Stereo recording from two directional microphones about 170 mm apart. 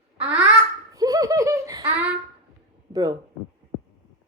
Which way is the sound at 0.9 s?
20° right (ahead or behind).